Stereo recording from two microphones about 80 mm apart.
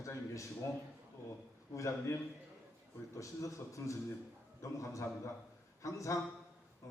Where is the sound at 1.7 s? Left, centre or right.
Left.